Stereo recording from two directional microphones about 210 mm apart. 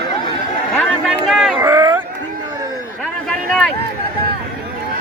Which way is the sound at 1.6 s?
15° right (ahead or behind).